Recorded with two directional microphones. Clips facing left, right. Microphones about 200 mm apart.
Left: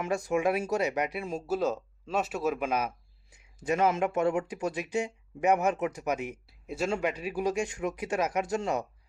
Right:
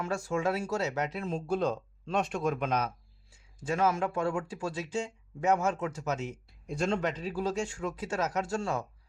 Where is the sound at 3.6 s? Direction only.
20° left (ahead or behind).